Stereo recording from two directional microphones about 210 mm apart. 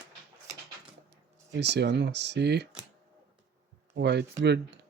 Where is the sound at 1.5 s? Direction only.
55° right (ahead or behind).